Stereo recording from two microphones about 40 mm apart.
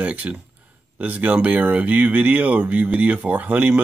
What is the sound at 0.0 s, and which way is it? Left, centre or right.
Speech, right.